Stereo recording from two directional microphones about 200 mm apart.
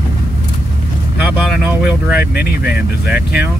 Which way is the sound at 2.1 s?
50° left (ahead or behind).